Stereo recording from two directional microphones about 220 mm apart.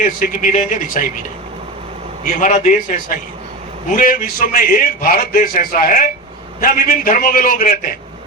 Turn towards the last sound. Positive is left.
turn(degrees=40)  # may be behind; listen again after turning